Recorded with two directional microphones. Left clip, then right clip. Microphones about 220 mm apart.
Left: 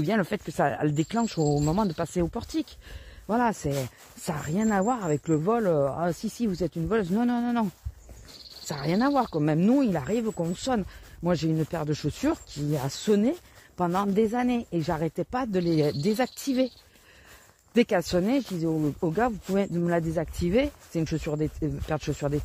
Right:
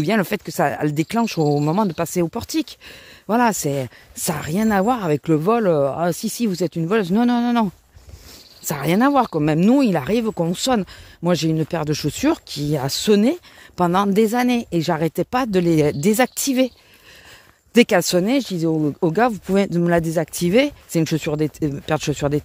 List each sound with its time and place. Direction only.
0.0 s speech: 35° right (ahead or behind)
17.7 s speech: 35° right (ahead or behind)